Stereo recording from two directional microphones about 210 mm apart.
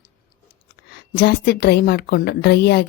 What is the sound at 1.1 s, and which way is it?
A woman's voice, 50° left (ahead or behind).